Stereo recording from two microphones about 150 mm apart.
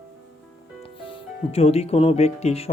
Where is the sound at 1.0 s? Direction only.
40° left (ahead or behind).